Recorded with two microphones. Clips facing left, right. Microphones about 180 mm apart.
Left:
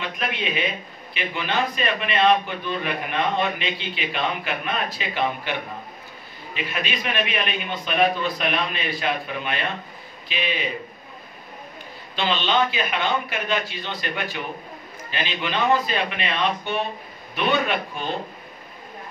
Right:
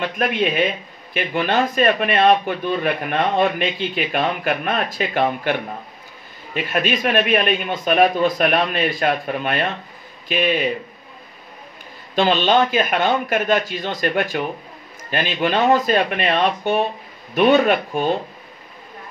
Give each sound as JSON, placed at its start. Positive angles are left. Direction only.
{"t": 0.0, "sound": "a man's voice", "side_deg": -50}
{"t": 12.2, "sound": "a man's voice", "side_deg": -45}